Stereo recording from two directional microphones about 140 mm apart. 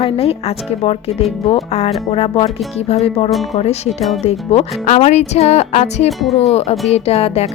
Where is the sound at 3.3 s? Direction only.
Centre (ahead or behind).